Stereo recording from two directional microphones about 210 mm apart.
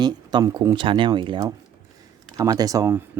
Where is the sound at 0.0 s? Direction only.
20° right (ahead or behind).